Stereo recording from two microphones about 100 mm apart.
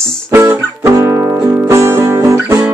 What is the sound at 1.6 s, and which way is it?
Music, 25° right (ahead or behind).